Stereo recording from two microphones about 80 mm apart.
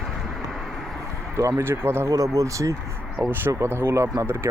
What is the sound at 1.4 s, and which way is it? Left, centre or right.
Speech, right.